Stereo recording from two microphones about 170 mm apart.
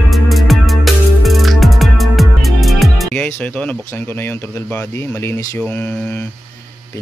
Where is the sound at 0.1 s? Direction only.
Centre (ahead or behind); by 5.6 s 20° left (ahead or behind).